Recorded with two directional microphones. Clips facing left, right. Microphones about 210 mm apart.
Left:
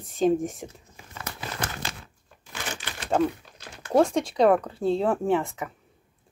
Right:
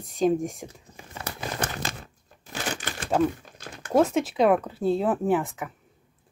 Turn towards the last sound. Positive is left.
turn(degrees=0)  # may be behind; listen again after turning